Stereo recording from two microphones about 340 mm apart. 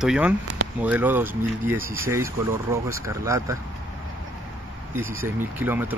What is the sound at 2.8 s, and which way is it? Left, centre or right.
Speech, centre.